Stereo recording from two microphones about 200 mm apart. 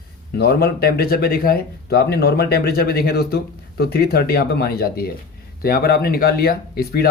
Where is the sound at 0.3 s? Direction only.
50° left (ahead or behind).